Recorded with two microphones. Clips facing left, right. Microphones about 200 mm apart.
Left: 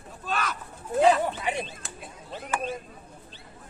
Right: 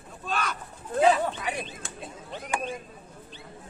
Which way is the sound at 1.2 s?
25° left (ahead or behind).